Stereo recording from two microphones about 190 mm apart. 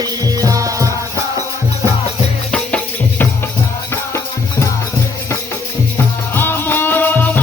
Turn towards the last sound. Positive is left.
turn(degrees=10)  # may be behind; listen again after turning